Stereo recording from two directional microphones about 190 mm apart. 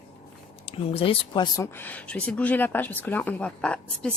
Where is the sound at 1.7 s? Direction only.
10° left (ahead or behind).